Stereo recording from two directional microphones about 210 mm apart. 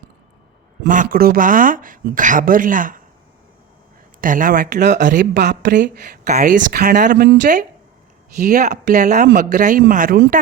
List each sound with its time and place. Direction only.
0.9 s speech: 40° right (ahead or behind)
4.2 s speech: 40° right (ahead or behind)
7.0 s speech: 40° right (ahead or behind)